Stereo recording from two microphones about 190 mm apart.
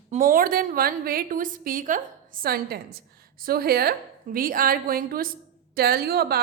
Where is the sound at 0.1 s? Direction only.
45° right (ahead or behind).